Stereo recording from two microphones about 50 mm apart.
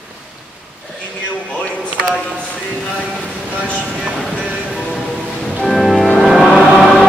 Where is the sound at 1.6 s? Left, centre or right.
Left.